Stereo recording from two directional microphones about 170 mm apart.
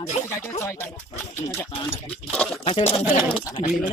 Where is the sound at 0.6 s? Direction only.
15° left (ahead or behind).